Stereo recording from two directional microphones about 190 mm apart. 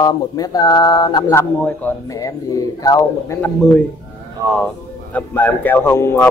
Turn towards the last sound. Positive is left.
turn(degrees=15)  # may be behind; listen again after turning